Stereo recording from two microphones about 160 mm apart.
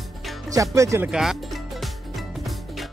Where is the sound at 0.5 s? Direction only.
20° right (ahead or behind).